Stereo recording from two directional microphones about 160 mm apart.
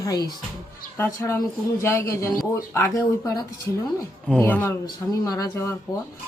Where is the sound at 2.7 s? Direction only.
15° left (ahead or behind).